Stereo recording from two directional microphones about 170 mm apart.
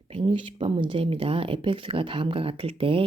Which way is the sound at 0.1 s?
30° right (ahead or behind).